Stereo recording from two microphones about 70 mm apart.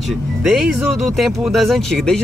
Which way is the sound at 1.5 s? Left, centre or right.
Centre.